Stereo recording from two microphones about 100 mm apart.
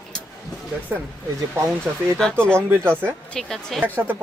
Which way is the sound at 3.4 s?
5° left (ahead or behind).